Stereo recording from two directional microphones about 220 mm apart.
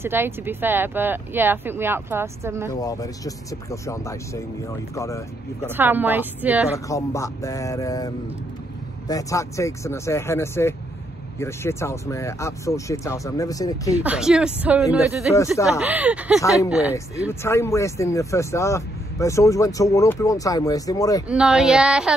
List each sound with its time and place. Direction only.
0.0 s speech: 10° right (ahead or behind)
2.7 s speech: 15° left (ahead or behind)
5.8 s speech: 10° right (ahead or behind)
6.9 s speech: 15° left (ahead or behind)
14.0 s speech: 5° right (ahead or behind)
16.3 s speech: 15° left (ahead or behind)
16.6 s speech: 5° right (ahead or behind)
16.9 s speech: 10° left (ahead or behind)
21.3 s speech: 5° right (ahead or behind)